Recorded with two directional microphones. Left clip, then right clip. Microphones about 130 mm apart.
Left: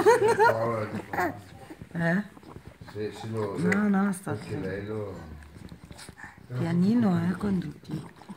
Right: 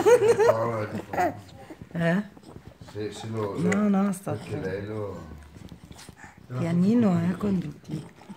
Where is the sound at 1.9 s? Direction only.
50° right (ahead or behind).